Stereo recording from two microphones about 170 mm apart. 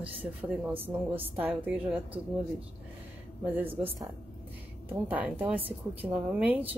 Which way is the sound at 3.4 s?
10° right (ahead or behind).